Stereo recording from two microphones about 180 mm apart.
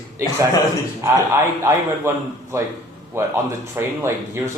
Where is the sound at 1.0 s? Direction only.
15° right (ahead or behind).